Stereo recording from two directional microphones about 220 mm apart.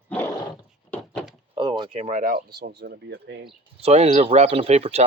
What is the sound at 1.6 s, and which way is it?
Speech, 20° right (ahead or behind).